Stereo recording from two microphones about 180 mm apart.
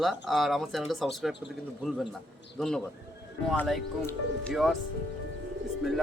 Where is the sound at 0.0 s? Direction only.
Centre (ahead or behind).